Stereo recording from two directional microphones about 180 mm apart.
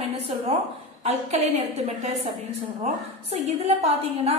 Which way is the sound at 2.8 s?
35° right (ahead or behind).